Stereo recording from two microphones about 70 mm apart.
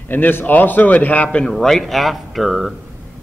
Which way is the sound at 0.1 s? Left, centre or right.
Left.